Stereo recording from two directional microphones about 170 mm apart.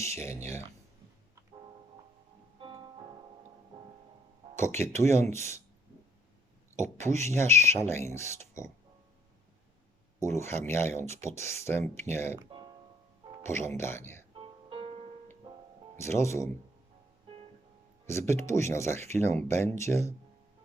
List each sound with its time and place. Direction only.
0.0 s speech: 15° left (ahead or behind)
2.6 s music: 30° right (ahead or behind)
4.8 s speech: 15° left (ahead or behind)
6.8 s speech: 15° left (ahead or behind)
10.2 s speech: 15° left (ahead or behind)
13.4 s speech: 15° left (ahead or behind)
14.3 s music: 30° right (ahead or behind)
16.0 s speech: 15° left (ahead or behind)
18.0 s speech: 15° left (ahead or behind)